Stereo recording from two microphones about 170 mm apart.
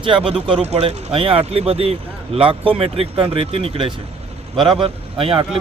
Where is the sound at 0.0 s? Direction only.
30° right (ahead or behind).